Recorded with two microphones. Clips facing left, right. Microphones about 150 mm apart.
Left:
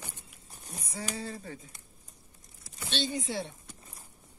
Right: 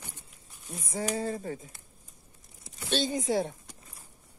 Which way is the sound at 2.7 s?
45° right (ahead or behind).